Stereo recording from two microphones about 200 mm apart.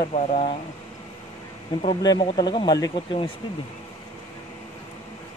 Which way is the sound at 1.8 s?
25° left (ahead or behind).